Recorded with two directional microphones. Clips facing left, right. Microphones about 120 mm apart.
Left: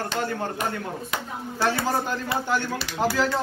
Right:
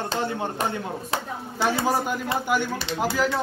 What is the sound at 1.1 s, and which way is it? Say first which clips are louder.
Speech: right 4 dB; 30° right (ahead or behind).